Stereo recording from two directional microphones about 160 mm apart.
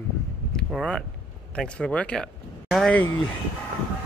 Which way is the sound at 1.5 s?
5° left (ahead or behind).